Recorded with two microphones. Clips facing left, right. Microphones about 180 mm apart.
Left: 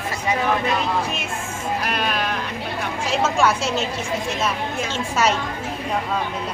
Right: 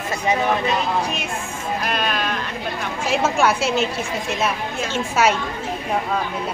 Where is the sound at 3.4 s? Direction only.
5° right (ahead or behind).